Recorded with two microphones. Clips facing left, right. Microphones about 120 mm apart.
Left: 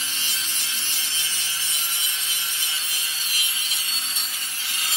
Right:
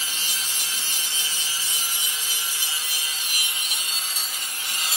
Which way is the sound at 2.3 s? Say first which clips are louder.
Right 1 dB; 10° right (ahead or behind).